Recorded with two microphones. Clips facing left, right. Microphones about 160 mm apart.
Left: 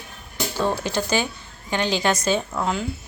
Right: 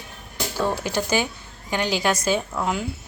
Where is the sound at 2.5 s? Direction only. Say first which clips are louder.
Left 1 dB; centre (ahead or behind).